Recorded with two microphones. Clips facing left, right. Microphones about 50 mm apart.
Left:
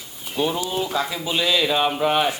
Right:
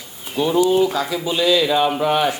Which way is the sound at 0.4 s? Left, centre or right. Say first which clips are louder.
Right 8 dB; centre.